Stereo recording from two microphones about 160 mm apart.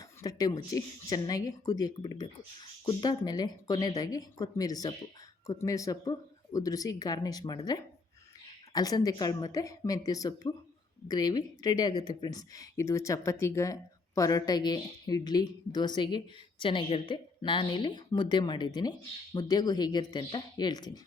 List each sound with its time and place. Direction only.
0.2 s speech: 25° left (ahead or behind)